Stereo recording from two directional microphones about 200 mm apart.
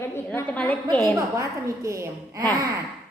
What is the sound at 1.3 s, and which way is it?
A woman's voice, 15° right (ahead or behind).